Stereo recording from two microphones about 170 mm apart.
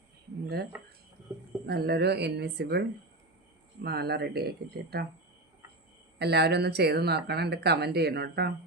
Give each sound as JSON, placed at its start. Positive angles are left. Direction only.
{"t": 0.4, "sound": "speech", "side_deg": -70}
{"t": 3.8, "sound": "speech", "side_deg": -70}
{"t": 6.1, "sound": "speech", "side_deg": -75}